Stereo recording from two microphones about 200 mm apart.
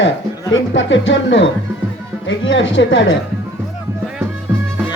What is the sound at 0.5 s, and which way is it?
Speech, 70° left (ahead or behind).